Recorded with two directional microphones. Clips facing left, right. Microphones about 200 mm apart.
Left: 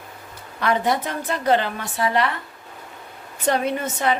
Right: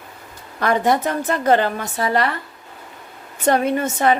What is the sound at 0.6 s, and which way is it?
A woman's voice, 45° right (ahead or behind).